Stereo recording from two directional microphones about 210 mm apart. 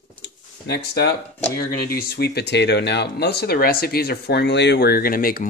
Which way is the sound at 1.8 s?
45° left (ahead or behind).